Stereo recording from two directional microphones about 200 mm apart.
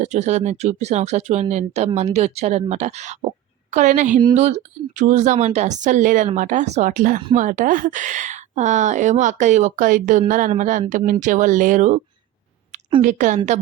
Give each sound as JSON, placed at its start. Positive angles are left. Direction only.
{"t": 0.0, "sound": "a woman's voice", "side_deg": -35}